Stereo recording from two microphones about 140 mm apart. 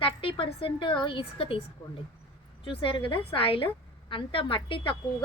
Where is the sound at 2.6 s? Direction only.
40° left (ahead or behind).